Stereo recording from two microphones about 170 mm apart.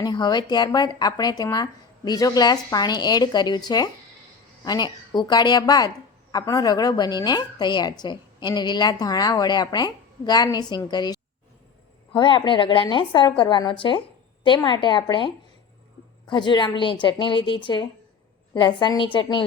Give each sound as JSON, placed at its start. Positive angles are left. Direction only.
{"t": 0.0, "sound": "a woman's voice", "side_deg": 25}
{"t": 16.3, "sound": "a woman's voice", "side_deg": 25}